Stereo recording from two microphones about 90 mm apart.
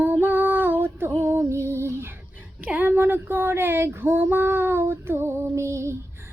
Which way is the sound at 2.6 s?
15° right (ahead or behind).